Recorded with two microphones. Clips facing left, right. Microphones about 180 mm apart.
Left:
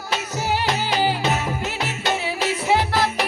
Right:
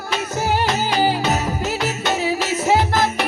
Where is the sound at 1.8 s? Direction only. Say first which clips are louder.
Right 2 dB; 40° right (ahead or behind).